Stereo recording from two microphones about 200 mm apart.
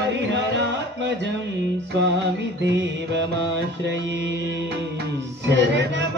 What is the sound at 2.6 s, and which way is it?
Music, 60° right (ahead or behind).